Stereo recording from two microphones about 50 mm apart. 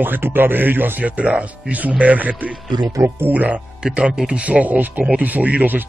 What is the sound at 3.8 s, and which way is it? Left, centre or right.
Speech, centre.